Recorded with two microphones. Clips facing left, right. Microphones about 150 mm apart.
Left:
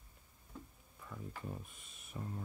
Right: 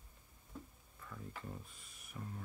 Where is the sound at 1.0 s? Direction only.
15° left (ahead or behind).